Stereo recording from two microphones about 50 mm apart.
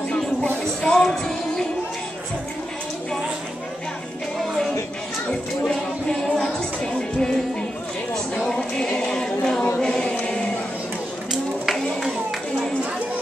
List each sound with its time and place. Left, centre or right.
0.8 s music: centre
5.7 s music: centre
9.8 s choir: centre
11.6 s a sound: centre